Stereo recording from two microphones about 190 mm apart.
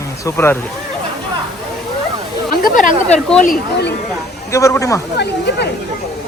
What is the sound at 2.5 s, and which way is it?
Speech, 45° left (ahead or behind).